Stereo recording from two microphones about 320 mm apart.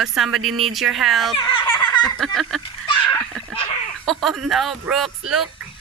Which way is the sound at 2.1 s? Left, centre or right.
Centre.